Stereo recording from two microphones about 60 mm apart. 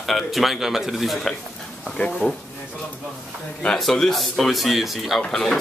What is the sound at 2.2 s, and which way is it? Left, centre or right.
Speech, centre.